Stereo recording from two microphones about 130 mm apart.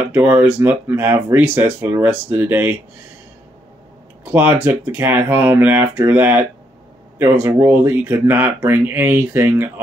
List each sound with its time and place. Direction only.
0.1 s speech: 15° right (ahead or behind)
4.2 s speech: 15° right (ahead or behind)